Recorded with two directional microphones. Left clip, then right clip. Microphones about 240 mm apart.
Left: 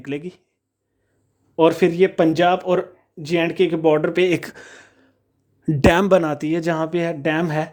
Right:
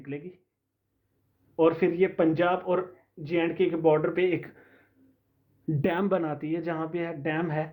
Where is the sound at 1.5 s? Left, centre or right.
Left.